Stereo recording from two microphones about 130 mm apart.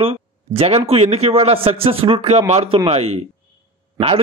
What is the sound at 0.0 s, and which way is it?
A man's voice, 45° right (ahead or behind).